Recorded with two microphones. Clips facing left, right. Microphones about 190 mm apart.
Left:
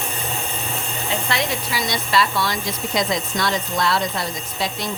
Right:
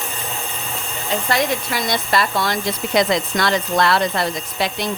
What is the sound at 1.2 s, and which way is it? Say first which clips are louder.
Speech: right 4 dB; 50° right (ahead or behind).